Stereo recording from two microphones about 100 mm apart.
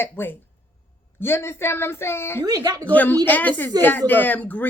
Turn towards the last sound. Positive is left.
turn(degrees=15)  # may be behind; listen again after turning